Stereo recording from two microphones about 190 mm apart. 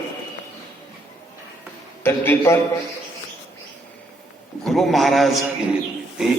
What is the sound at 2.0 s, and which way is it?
Speech, 10° left (ahead or behind).